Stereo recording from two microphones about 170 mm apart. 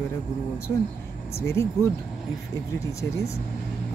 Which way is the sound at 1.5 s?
15° left (ahead or behind).